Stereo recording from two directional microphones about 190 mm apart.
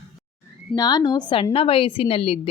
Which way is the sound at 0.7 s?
20° left (ahead or behind).